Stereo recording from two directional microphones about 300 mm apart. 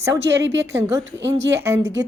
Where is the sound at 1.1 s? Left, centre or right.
Right.